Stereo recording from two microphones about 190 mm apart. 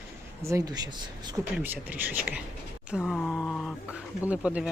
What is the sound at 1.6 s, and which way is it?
Speech, 10° right (ahead or behind).